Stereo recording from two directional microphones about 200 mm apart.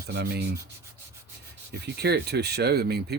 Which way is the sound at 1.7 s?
55° right (ahead or behind).